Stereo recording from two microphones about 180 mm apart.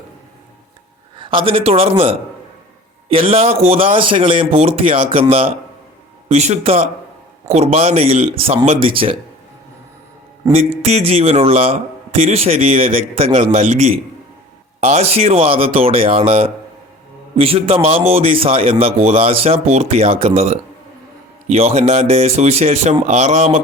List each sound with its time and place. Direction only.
1.2 s speech: 30° right (ahead or behind)
10.5 s speech: 35° right (ahead or behind)